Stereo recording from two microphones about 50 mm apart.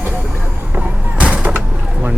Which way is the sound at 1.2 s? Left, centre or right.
Right.